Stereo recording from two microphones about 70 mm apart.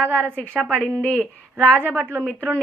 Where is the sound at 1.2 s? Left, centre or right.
Right.